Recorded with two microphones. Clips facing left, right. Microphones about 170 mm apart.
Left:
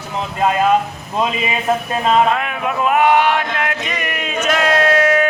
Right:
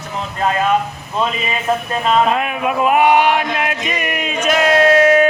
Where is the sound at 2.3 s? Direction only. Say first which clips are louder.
Right 2 dB; 20° right (ahead or behind).